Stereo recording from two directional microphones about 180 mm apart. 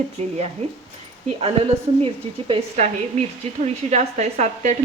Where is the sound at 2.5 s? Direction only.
35° right (ahead or behind).